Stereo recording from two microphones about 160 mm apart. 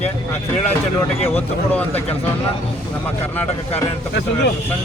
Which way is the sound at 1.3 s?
10° left (ahead or behind).